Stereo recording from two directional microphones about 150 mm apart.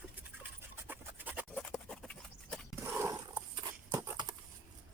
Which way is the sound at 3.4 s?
30° right (ahead or behind).